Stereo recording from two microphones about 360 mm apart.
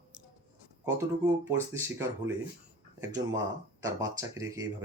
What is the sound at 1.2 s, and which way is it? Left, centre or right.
Speech, centre.